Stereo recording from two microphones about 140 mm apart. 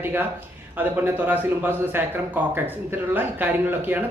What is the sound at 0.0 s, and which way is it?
Speech, 15° right (ahead or behind).